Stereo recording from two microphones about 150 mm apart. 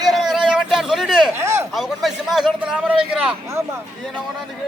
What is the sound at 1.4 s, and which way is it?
Speech, 15° right (ahead or behind).